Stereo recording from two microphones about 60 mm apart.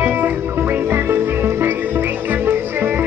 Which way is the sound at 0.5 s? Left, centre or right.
Right.